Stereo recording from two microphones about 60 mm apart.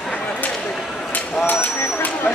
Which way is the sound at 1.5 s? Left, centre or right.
Left.